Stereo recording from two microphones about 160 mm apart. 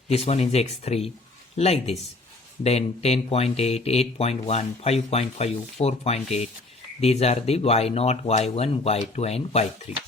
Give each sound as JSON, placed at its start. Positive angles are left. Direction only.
{"t": 0.1, "sound": "speech", "side_deg": 40}